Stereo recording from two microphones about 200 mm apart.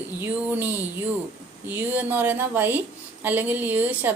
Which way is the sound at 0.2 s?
10° right (ahead or behind).